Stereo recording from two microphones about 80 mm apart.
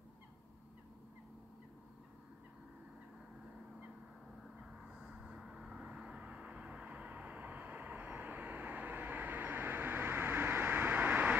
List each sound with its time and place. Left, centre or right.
4.6 s vehicle: centre